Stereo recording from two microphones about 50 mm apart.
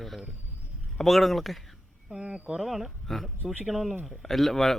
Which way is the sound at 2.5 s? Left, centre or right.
Centre.